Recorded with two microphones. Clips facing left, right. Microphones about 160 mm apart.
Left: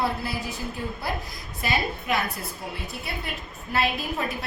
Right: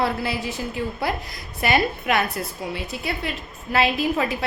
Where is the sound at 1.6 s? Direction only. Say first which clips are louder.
Right 6 dB; 70° right (ahead or behind).